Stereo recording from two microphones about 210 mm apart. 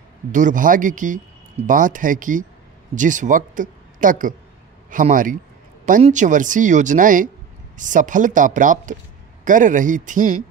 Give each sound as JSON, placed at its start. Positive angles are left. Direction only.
{"t": 0.3, "sound": "a man's voice", "side_deg": -40}